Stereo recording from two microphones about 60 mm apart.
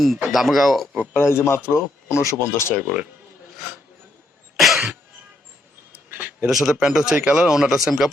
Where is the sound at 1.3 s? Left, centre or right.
Left.